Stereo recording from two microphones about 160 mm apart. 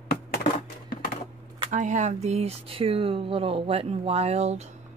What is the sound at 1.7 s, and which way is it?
Speech, 50° right (ahead or behind).